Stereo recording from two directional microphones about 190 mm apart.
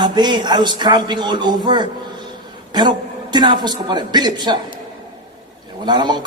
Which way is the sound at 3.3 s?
20° right (ahead or behind).